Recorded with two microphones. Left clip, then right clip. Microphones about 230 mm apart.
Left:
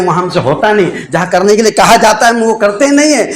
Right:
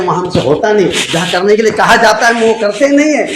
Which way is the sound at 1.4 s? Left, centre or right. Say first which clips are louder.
Left 2 dB; left.